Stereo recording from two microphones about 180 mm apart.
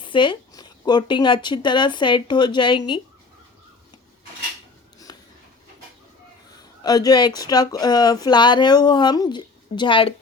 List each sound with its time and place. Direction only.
0.0 s speech: 25° left (ahead or behind)
5.1 s a sound: 25° left (ahead or behind)
6.6 s speech: 20° left (ahead or behind)